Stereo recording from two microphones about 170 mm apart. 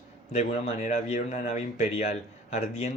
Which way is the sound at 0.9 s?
40° left (ahead or behind).